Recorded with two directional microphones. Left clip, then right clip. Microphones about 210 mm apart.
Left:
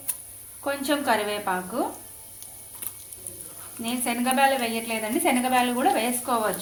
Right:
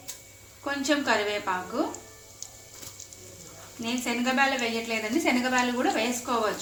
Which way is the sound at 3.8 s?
50° left (ahead or behind).